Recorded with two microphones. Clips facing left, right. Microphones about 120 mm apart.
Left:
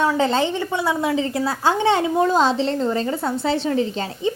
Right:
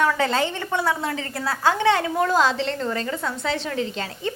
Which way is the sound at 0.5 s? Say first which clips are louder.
Left 2 dB; 15° left (ahead or behind).